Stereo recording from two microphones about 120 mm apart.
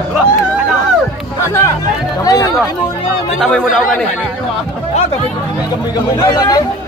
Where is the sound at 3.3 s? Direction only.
5° left (ahead or behind).